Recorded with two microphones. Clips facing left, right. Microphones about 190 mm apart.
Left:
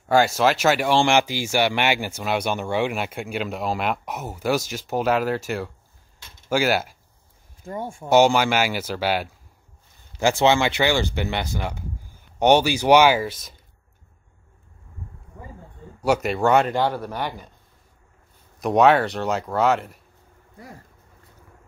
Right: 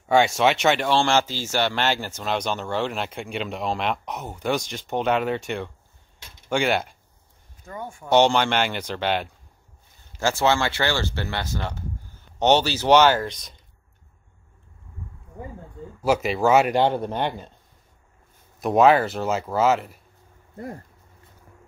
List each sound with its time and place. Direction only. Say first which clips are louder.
0.1 s speech: even; centre (ahead or behind)
0.8 s speech: left 2 dB; 15° left (ahead or behind)
7.6 s speech: left 4 dB; 30° left (ahead or behind)
8.1 s speech: left 2 dB; 5° left (ahead or behind)
10.1 s speech: left 3 dB; 15° left (ahead or behind)
16.0 s speech: even; centre (ahead or behind)
16.6 s speech: right 2 dB; 20° right (ahead or behind)
18.6 s speech: even; centre (ahead or behind)